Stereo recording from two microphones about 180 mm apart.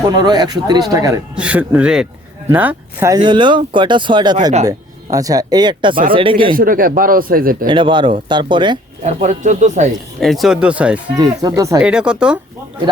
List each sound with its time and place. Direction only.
0.0 s speech: 25° right (ahead or behind)
1.4 s speech: 10° right (ahead or behind)
3.2 s speech: 25° right (ahead or behind)
6.5 s speech: 50° right (ahead or behind)
7.7 s speech: 25° right (ahead or behind)
9.0 s speech: 45° right (ahead or behind)
10.2 s speech: centre (ahead or behind)
11.2 s speech: 20° right (ahead or behind)
11.8 s speech: 5° right (ahead or behind)